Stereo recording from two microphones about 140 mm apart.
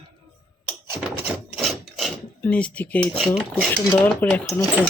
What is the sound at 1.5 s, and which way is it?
Filing, centre (ahead or behind).